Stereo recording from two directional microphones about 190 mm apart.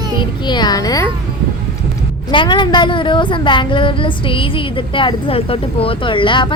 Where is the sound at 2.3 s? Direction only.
25° left (ahead or behind).